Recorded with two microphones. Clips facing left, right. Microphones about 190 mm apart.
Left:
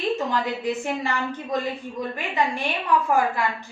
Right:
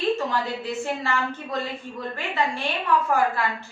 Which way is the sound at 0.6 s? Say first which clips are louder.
Left 2 dB; 15° left (ahead or behind).